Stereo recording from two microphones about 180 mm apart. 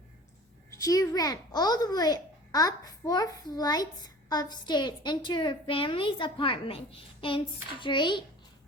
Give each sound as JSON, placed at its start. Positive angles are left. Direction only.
{"t": 0.8, "sound": "a woman's voice", "side_deg": 20}